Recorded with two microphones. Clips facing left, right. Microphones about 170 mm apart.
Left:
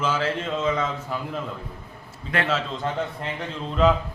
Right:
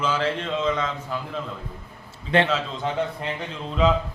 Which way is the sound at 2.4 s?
Centre (ahead or behind).